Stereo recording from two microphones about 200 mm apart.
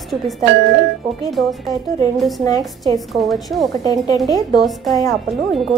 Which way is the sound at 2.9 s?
Centre (ahead or behind).